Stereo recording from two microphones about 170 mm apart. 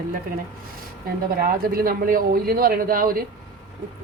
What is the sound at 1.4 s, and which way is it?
Speech, 60° right (ahead or behind).